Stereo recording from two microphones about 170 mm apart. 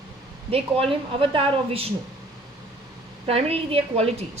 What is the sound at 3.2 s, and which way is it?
A woman's voice, 35° right (ahead or behind).